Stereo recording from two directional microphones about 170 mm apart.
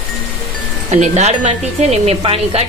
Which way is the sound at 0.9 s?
40° right (ahead or behind).